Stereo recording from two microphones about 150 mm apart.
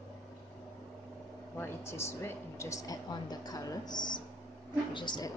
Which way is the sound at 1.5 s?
15° left (ahead or behind).